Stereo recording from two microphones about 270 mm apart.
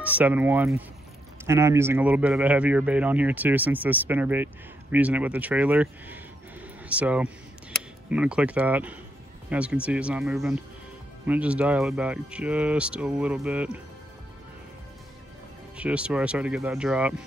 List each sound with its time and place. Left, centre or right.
0.0 s speech: centre
15.7 s speech: centre